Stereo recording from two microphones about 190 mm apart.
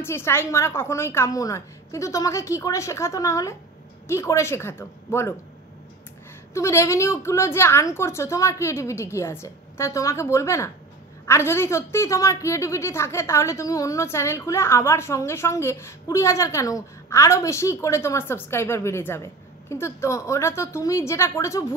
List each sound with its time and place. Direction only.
0.0 s a woman's voice: 15° left (ahead or behind)
6.5 s a woman's voice: 15° left (ahead or behind)